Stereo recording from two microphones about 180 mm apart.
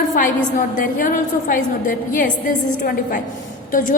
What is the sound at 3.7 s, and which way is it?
Speech, 50° left (ahead or behind).